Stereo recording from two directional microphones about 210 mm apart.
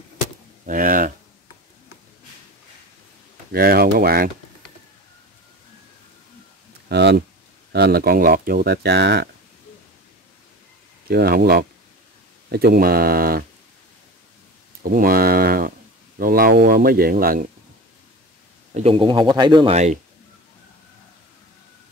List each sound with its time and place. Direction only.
0.7 s speech: 40° right (ahead or behind)
3.5 s speech: 45° right (ahead or behind)
6.9 s speech: 55° right (ahead or behind)
11.1 s speech: 45° right (ahead or behind)
14.8 s speech: 45° right (ahead or behind)
18.7 s speech: 30° right (ahead or behind)